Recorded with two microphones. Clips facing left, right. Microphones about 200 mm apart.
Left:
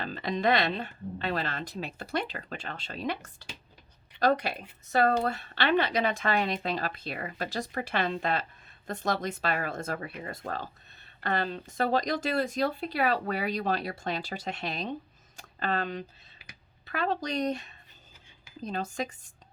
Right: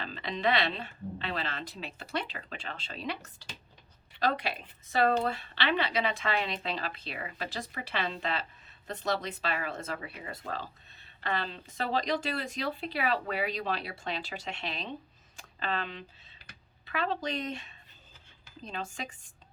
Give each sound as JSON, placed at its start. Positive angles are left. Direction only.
{"t": 0.0, "sound": "a woman's voice", "side_deg": 45}
{"t": 4.2, "sound": "a woman's voice", "side_deg": 45}